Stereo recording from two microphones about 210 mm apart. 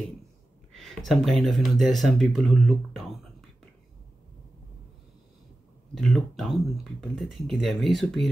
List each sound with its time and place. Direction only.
0.7 s speech: centre (ahead or behind)
5.9 s speech: centre (ahead or behind)